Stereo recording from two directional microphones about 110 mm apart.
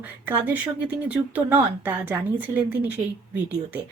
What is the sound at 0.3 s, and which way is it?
Speech, 15° right (ahead or behind).